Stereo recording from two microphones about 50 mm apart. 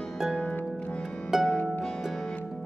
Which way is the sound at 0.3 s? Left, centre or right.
Left.